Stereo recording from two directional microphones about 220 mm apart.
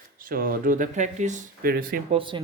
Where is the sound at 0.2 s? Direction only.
40° right (ahead or behind).